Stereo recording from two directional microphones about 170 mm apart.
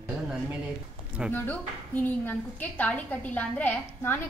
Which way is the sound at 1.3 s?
10° left (ahead or behind).